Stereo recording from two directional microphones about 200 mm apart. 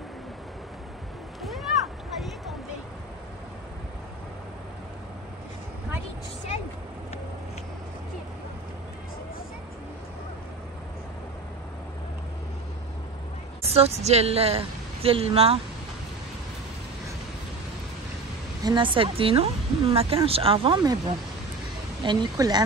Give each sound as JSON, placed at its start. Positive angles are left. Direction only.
{"t": 13.7, "sound": "a woman's voice", "side_deg": -30}
{"t": 18.6, "sound": "speech", "side_deg": -20}
{"t": 22.0, "sound": "speech", "side_deg": -20}